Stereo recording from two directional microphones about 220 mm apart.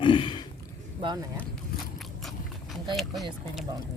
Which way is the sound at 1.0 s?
20° right (ahead or behind).